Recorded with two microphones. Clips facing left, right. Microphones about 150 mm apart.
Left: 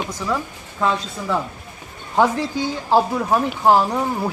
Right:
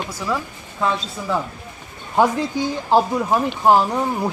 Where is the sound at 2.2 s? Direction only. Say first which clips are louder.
Even; 15° right (ahead or behind).